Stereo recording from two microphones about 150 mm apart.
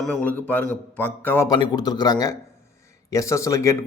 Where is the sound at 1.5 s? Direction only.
25° left (ahead or behind).